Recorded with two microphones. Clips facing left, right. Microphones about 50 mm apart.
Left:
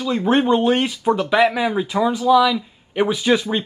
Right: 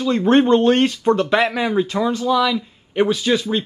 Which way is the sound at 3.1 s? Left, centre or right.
Centre.